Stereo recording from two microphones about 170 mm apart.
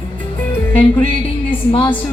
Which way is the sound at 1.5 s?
30° left (ahead or behind).